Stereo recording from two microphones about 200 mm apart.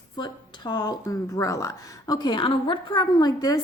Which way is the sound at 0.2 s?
20° left (ahead or behind).